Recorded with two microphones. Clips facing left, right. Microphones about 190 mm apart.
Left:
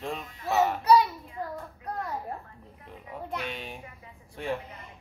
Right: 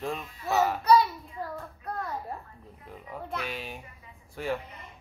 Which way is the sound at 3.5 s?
5° right (ahead or behind).